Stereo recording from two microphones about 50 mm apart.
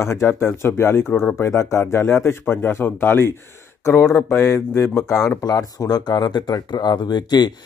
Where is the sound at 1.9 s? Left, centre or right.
Left.